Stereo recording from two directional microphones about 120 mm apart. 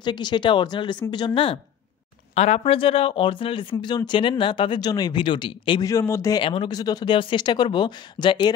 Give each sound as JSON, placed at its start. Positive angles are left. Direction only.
{"t": 0.0, "sound": "speech", "side_deg": 40}
{"t": 2.3, "sound": "speech", "side_deg": 65}
{"t": 5.9, "sound": "a man's voice", "side_deg": 25}
{"t": 6.3, "sound": "speech", "side_deg": 45}
{"t": 6.7, "sound": "speech", "side_deg": 35}